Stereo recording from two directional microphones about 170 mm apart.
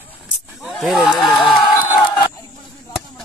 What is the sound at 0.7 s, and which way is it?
Speech, centre (ahead or behind).